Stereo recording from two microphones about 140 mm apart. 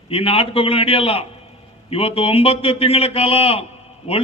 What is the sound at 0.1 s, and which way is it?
A man's voice, 40° left (ahead or behind).